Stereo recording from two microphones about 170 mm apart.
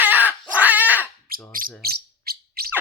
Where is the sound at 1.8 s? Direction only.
65° right (ahead or behind).